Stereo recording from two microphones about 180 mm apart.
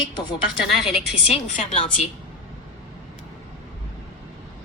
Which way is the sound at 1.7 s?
35° left (ahead or behind).